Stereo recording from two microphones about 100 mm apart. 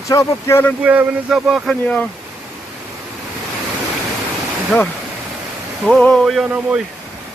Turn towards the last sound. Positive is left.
turn(degrees=0)  # may be behind; listen again after turning